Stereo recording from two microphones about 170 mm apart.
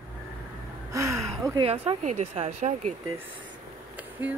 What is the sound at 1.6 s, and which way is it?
Speech, 35° right (ahead or behind).